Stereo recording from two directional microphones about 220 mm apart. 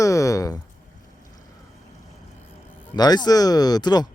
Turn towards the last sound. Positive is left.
turn(degrees=20)  # may be behind; listen again after turning